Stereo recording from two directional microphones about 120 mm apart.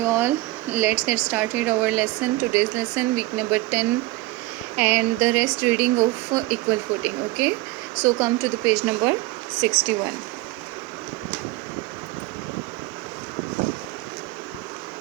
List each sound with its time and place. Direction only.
0.0 s speech: 20° right (ahead or behind)